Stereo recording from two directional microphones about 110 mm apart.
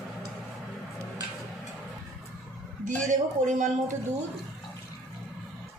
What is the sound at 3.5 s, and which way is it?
Speech, 90° right.